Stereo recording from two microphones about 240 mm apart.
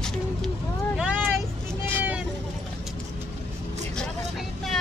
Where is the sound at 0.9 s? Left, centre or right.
Centre.